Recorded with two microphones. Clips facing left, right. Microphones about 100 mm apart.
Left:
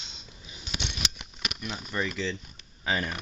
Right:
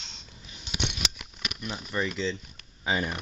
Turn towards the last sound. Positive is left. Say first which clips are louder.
# right 1 dB
turn(degrees=-10)  # may be behind; listen again after turning